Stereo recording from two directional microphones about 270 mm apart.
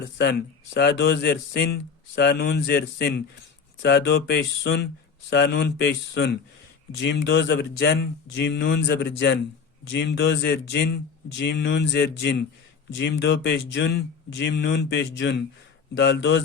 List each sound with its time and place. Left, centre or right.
0.0 s speech: left